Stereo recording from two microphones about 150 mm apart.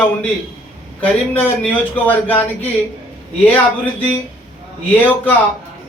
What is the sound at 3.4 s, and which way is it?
Speech, 10° left (ahead or behind).